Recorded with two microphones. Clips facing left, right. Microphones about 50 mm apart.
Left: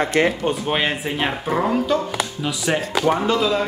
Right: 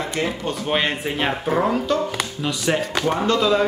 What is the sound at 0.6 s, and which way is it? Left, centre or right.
Speech, centre.